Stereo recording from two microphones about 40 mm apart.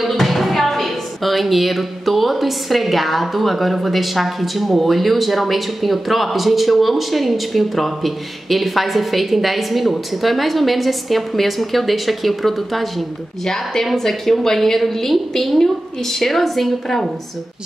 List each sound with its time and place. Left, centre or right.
0.0 s a woman's voice: centre
13.9 s a woman's voice: centre